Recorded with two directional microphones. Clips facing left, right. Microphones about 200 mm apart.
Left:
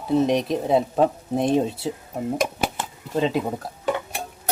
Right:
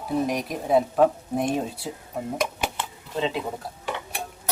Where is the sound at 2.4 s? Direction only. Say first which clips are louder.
Left 3 dB; 45° left (ahead or behind).